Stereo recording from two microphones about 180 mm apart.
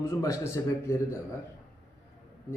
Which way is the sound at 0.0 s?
15° left (ahead or behind).